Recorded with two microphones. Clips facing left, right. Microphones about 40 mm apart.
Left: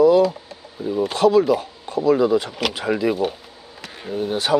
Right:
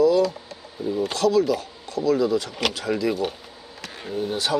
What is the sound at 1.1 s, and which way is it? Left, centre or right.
Speech, left.